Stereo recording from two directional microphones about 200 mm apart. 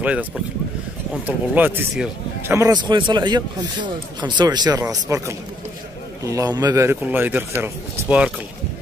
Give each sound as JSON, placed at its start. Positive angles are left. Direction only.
{"t": 0.0, "sound": "speech", "side_deg": -5}